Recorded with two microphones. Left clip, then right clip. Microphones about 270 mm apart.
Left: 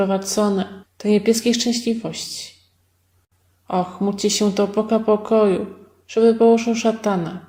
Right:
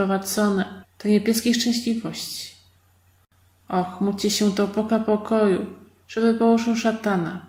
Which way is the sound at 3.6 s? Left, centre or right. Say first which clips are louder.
Left 3 dB; centre.